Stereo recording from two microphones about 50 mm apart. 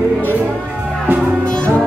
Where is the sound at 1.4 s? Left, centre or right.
Left.